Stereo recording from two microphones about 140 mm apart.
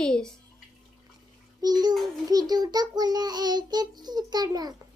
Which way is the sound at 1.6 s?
30° right (ahead or behind).